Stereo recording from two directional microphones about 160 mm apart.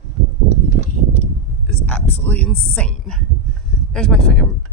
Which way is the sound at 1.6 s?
10° left (ahead or behind).